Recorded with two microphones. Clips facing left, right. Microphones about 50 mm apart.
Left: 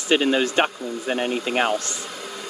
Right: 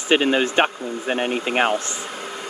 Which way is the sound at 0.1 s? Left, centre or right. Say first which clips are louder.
Right 1 dB; right.